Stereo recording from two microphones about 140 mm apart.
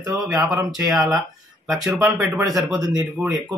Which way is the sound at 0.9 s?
Centre (ahead or behind).